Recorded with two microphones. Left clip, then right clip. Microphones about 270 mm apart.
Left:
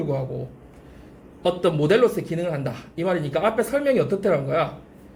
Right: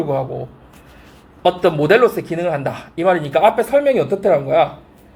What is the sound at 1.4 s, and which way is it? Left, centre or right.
Speech, centre.